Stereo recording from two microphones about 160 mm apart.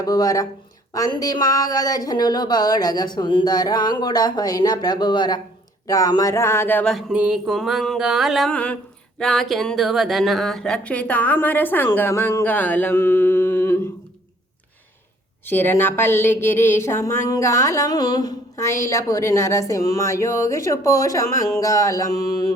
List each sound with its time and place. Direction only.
0.0 s speech: 20° left (ahead or behind)
6.9 s mantra: 5° right (ahead or behind); by 13.7 s 15° left (ahead or behind)
15.4 s speech: 15° left (ahead or behind)